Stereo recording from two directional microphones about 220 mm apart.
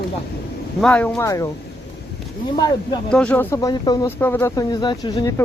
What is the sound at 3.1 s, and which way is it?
Speech, 5° left (ahead or behind).